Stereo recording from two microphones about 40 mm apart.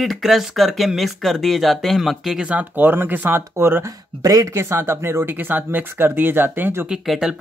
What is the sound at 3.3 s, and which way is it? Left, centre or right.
Speech, right.